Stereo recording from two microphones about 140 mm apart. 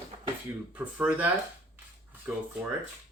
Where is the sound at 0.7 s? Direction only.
10° right (ahead or behind).